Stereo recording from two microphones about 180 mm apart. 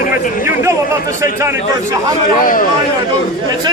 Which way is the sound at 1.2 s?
15° right (ahead or behind).